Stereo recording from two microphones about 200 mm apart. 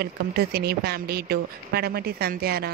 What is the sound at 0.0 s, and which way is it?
A woman's voice, 55° right (ahead or behind).